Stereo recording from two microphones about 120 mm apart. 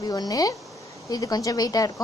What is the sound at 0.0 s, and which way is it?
A woman's voice, 35° left (ahead or behind).